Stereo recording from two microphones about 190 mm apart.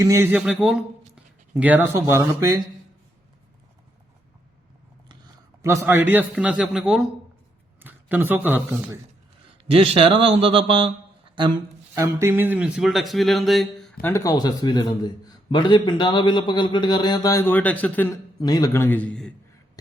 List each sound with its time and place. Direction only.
0.0 s speech: 15° right (ahead or behind)
5.0 s a man's voice: 20° right (ahead or behind); by 7.1 s 5° right (ahead or behind)
7.8 s a sound: 10° right (ahead or behind)
8.4 s a man's voice: 10° right (ahead or behind)
9.6 s speech: 30° right (ahead or behind); by 13.9 s centre (ahead or behind)
14.0 s a man's voice: 15° left (ahead or behind)